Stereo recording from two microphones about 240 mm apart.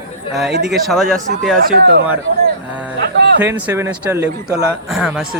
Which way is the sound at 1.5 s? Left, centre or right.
Right.